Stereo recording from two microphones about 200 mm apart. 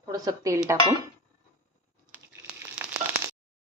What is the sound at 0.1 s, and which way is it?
Speech, 15° right (ahead or behind).